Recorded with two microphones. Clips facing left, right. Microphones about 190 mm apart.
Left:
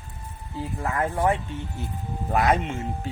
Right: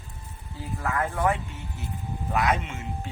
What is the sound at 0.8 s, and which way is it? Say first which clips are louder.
Speech: left 2 dB; 25° left (ahead or behind).